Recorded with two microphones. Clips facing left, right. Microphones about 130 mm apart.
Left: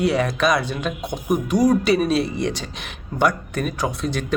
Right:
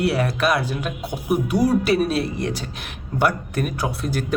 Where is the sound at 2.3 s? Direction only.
75° left (ahead or behind).